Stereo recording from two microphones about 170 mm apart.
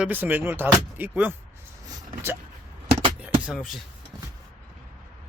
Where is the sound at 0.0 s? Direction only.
10° right (ahead or behind).